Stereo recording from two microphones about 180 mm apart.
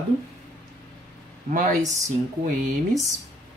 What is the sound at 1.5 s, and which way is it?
Speech, 45° right (ahead or behind).